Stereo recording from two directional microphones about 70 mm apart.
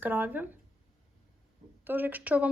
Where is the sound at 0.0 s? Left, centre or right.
Right.